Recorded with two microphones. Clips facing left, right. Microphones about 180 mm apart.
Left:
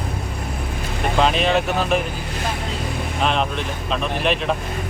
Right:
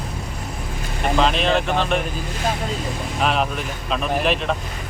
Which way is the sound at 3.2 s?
5° right (ahead or behind).